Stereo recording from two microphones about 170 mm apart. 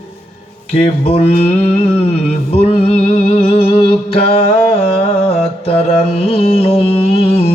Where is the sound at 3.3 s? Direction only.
35° left (ahead or behind).